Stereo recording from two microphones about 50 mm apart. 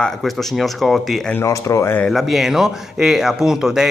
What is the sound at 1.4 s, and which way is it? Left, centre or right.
Speech, left.